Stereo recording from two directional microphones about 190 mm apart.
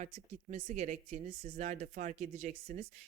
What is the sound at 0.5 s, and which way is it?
Speech, 35° right (ahead or behind).